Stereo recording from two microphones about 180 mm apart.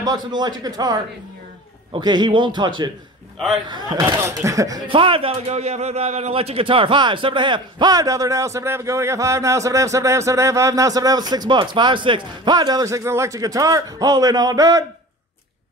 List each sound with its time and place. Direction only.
0.0 s a man's voice: 25° right (ahead or behind)